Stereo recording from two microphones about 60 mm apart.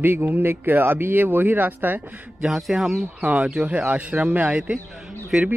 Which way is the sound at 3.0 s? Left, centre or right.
Right.